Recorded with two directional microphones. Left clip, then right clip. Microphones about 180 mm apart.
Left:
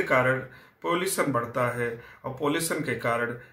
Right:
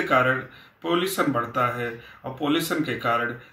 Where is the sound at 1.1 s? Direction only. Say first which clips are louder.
Right 3 dB; 20° left (ahead or behind).